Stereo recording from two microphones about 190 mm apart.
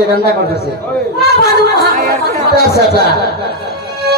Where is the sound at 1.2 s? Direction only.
55° left (ahead or behind).